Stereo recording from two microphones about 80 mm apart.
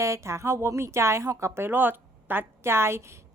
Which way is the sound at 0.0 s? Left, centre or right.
Right.